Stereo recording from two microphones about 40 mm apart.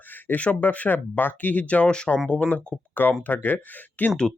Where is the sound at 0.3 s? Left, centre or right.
Left.